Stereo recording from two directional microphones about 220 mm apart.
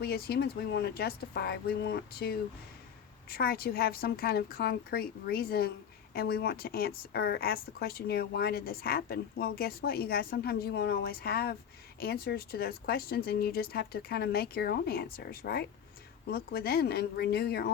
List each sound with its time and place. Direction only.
0.0 s speech: 45° left (ahead or behind)